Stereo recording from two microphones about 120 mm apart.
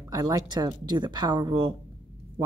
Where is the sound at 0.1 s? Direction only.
35° right (ahead or behind).